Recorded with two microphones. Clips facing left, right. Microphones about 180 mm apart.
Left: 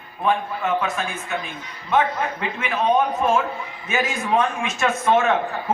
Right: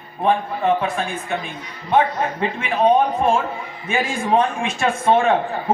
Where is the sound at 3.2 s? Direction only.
30° right (ahead or behind).